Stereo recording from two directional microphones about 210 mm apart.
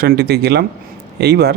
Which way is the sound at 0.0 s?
50° right (ahead or behind).